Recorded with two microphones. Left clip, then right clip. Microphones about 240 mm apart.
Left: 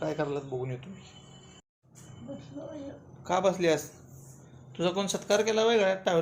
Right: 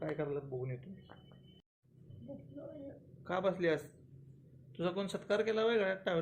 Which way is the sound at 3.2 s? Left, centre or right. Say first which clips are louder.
Left 8 dB; centre.